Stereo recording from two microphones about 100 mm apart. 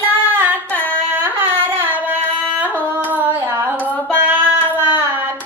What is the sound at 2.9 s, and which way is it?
Hands, 20° right (ahead or behind).